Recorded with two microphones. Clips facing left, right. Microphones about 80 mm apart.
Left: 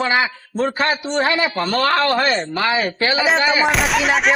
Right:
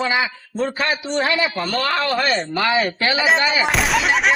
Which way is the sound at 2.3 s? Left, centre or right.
Centre.